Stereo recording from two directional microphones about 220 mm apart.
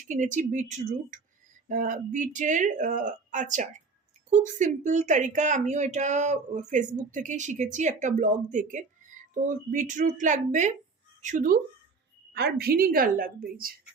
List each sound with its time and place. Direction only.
0.0 s a woman's voice: 35° right (ahead or behind)
12.3 s a woman's voice: 50° right (ahead or behind)